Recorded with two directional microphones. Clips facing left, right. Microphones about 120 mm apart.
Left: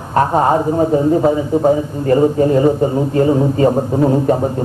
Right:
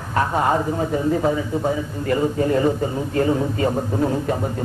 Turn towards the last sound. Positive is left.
turn(degrees=30)  # may be behind; listen again after turning